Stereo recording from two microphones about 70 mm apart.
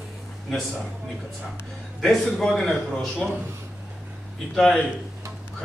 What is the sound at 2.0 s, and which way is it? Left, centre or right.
A man's voice, centre.